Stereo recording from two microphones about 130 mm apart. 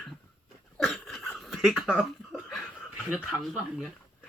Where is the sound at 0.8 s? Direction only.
Centre (ahead or behind).